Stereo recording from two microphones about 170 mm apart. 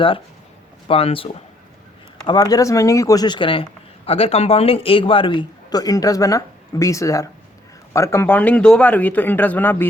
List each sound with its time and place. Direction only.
0.9 s speech: 35° left (ahead or behind); by 9.9 s 10° left (ahead or behind)